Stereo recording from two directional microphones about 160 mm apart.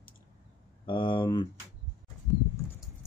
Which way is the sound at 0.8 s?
30° left (ahead or behind).